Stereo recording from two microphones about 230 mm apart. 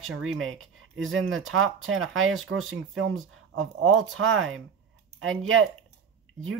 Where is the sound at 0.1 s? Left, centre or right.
Right.